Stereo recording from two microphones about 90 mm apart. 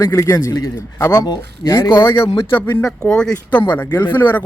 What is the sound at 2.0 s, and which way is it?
Speech, 30° left (ahead or behind).